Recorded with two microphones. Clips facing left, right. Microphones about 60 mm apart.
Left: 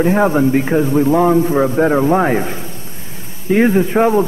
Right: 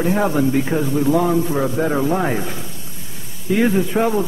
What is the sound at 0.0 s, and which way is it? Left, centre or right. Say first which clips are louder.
A man's voice: left 5 dB; left.